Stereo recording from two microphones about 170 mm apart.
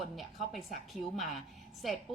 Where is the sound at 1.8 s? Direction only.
Centre (ahead or behind).